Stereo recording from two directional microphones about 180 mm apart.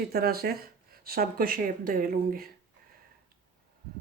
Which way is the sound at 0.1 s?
60° right (ahead or behind).